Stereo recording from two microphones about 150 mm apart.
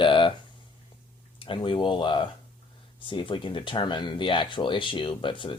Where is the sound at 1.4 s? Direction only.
35° left (ahead or behind).